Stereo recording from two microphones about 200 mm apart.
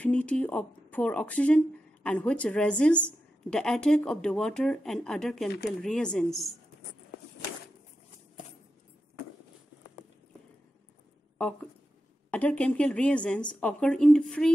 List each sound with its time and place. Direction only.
0.0 s a woman's voice: 5° left (ahead or behind)
5.5 s speech: 55° left (ahead or behind)
5.8 s a woman's voice: 5° left (ahead or behind)
12.3 s a woman's voice: 5° left (ahead or behind)